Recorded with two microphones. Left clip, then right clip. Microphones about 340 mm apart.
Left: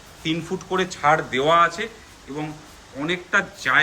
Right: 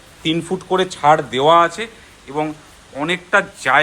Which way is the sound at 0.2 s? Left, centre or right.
Centre.